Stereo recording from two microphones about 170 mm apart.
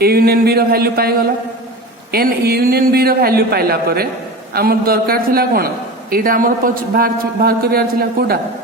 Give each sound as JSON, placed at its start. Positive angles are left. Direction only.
{"t": 0.0, "sound": "a man's voice", "side_deg": -65}
{"t": 2.1, "sound": "a man's voice", "side_deg": -65}